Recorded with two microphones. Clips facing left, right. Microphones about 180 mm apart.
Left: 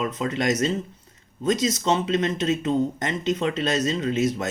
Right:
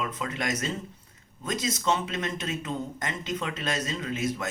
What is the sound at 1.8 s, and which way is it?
Speech, 25° left (ahead or behind).